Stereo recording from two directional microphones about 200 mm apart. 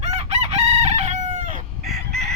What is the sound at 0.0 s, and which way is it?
Chicken, 35° right (ahead or behind).